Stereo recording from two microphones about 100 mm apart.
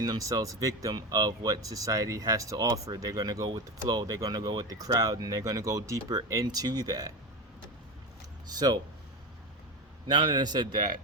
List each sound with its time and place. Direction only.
0.0 s speech: 40° right (ahead or behind)
8.5 s a man's voice: 40° right (ahead or behind)
10.1 s a man's voice: 50° right (ahead or behind)